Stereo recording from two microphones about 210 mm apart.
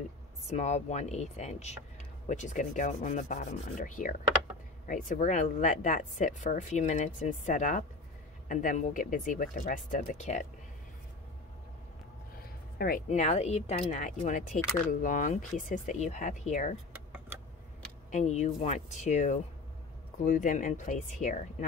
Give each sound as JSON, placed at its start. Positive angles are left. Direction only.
{"t": 0.5, "sound": "speech", "side_deg": 35}
{"t": 12.7, "sound": "speech", "side_deg": 45}
{"t": 16.9, "sound": "a sound", "side_deg": -5}
{"t": 18.1, "sound": "speech", "side_deg": 30}